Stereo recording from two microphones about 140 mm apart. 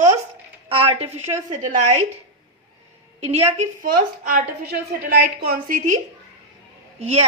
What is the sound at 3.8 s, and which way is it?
A woman's voice, 85° right.